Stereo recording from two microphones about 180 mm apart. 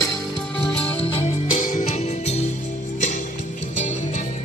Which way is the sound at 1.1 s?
45° left (ahead or behind).